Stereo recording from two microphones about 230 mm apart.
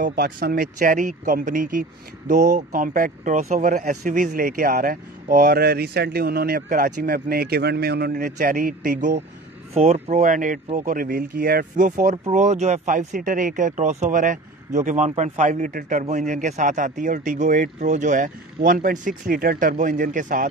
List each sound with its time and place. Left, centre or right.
0.0 s speech: right
9.8 s speech: right